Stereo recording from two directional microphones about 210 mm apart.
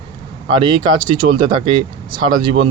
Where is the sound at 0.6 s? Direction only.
25° right (ahead or behind).